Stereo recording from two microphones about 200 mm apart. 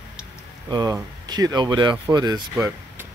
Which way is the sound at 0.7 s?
20° right (ahead or behind).